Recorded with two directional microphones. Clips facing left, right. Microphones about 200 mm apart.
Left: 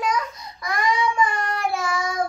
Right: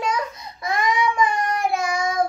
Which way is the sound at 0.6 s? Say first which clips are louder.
Right 1 dB; 20° right (ahead or behind).